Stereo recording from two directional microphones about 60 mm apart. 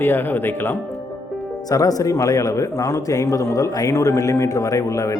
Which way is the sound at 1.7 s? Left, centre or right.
Left.